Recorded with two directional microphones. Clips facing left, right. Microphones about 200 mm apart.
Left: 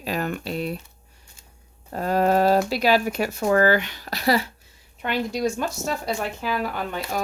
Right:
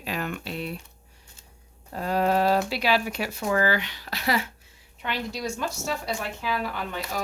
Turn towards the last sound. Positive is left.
turn(degrees=45)  # may be behind; listen again after turning